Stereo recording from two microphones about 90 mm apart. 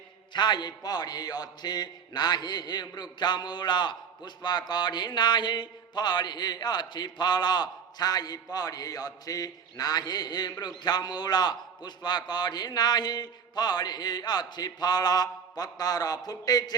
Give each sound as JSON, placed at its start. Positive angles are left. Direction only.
{"t": 0.3, "sound": "a man's voice", "side_deg": 55}